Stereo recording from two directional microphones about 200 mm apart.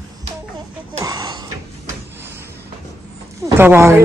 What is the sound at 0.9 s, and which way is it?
Gasp, 20° right (ahead or behind).